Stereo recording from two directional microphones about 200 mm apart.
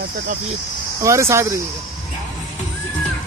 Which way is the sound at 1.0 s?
15° right (ahead or behind).